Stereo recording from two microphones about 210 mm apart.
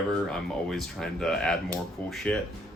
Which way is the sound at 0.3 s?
Centre (ahead or behind).